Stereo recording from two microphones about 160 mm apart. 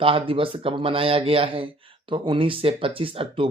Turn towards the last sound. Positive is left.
turn(degrees=-35)  # may be behind; listen again after turning